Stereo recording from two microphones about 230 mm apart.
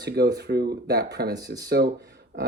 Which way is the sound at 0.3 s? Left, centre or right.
Right.